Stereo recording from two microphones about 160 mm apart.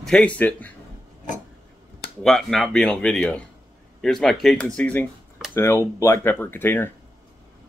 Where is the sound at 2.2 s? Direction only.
5° left (ahead or behind).